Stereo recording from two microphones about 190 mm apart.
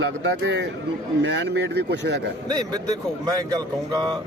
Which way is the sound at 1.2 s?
70° right (ahead or behind).